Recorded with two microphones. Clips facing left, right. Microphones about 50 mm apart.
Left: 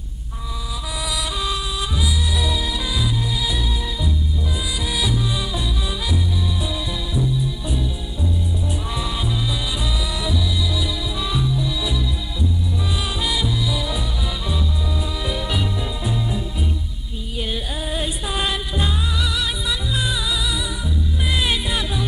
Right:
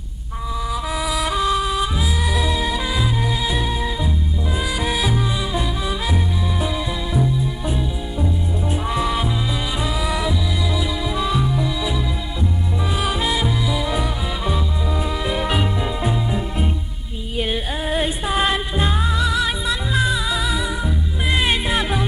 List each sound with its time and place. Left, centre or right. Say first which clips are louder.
1.2 s music: right 9 dB; right
7.2 s music: right 1 dB; right
13.2 s music: right 2 dB; right
20.8 s music: right 2 dB; right